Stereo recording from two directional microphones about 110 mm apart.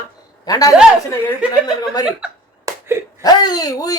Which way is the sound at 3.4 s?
35° left (ahead or behind).